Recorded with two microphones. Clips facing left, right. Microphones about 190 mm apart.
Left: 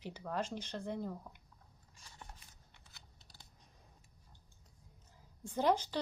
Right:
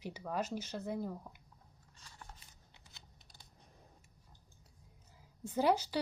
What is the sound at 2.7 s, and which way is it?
Computer keyboard, 20° right (ahead or behind).